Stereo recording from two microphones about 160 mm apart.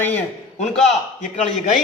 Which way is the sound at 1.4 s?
50° left (ahead or behind).